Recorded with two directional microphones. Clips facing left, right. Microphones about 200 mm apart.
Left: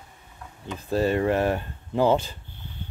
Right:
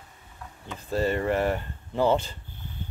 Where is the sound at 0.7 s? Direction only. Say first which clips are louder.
Left 3 dB; 15° left (ahead or behind).